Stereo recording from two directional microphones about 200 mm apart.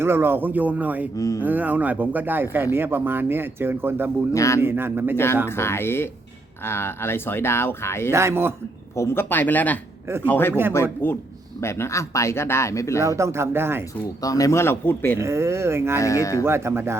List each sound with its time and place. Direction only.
0.0 s speech: 10° right (ahead or behind)
1.1 s speech: 15° left (ahead or behind)
1.4 s speech: 10° right (ahead or behind)
4.3 s speech: 15° left (ahead or behind)
4.6 s speech: 10° right (ahead or behind)
5.1 s speech: 10° left (ahead or behind)
8.1 s speech: 10° right (ahead or behind)
9.0 s speech: 10° left (ahead or behind)
13.0 s speech: 15° right (ahead or behind)
14.2 s speech: 15° left (ahead or behind)
15.2 s speech: 15° right (ahead or behind)
16.0 s speech: 15° left (ahead or behind)
16.4 s speech: 15° right (ahead or behind)